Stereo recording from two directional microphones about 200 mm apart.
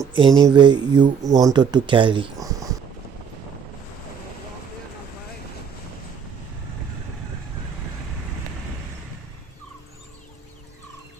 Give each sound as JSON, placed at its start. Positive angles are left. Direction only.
{"t": 0.1, "sound": "speech", "side_deg": -20}